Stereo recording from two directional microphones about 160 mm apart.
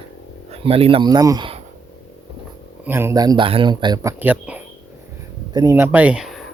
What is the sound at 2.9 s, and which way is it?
Speech, 15° right (ahead or behind).